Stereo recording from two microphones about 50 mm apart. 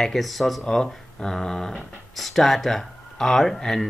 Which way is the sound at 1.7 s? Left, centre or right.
Centre.